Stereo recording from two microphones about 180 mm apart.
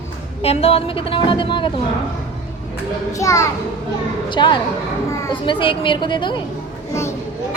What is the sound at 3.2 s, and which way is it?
A child's voice, 15° left (ahead or behind).